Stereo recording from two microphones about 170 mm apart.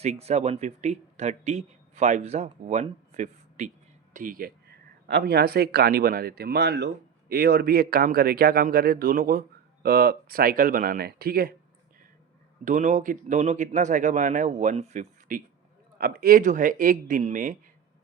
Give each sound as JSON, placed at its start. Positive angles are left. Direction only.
{"t": 0.0, "sound": "speech", "side_deg": -40}
{"t": 4.1, "sound": "speech", "side_deg": -55}
{"t": 12.6, "sound": "speech", "side_deg": -45}
{"t": 16.0, "sound": "speech", "side_deg": -60}